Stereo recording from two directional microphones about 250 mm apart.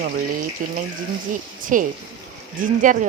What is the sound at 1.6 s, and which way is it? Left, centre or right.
Speech, right.